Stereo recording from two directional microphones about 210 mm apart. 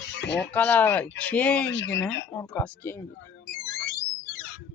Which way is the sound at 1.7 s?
65° left (ahead or behind).